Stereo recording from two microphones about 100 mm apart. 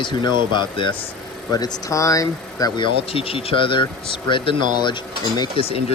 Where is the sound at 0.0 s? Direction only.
50° left (ahead or behind).